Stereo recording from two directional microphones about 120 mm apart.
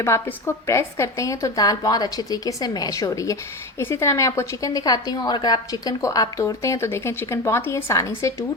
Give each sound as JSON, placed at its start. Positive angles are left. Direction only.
{"t": 0.0, "sound": "a woman's voice", "side_deg": 20}